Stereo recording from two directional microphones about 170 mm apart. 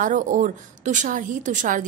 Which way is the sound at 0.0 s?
50° right (ahead or behind).